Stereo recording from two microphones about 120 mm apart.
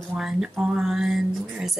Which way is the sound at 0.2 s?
5° right (ahead or behind).